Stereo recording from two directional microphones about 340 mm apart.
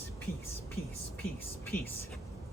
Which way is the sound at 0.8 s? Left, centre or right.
Left.